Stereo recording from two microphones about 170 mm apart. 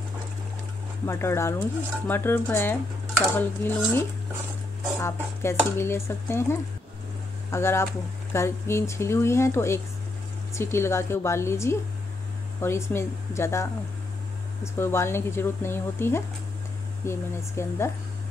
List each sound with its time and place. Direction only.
1.0 s speech: 15° left (ahead or behind)
5.0 s speech: 15° left (ahead or behind)